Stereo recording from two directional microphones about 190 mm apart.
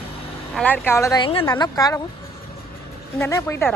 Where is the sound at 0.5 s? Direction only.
10° left (ahead or behind).